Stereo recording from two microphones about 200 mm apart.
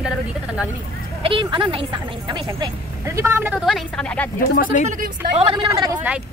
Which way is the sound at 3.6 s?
Centre (ahead or behind).